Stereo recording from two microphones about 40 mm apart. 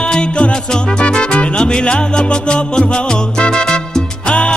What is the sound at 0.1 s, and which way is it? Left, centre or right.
Music, left.